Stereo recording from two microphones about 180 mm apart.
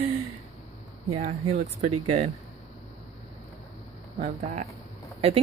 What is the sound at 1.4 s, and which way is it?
Speech, 35° right (ahead or behind).